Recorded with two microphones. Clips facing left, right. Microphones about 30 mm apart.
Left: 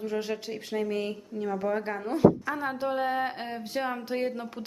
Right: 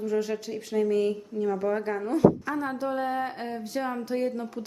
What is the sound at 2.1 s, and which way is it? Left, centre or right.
Speech, centre.